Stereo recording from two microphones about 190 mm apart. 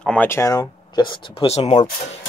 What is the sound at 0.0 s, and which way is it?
Speech, 5° left (ahead or behind).